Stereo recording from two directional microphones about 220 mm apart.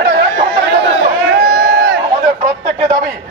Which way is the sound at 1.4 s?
45° right (ahead or behind).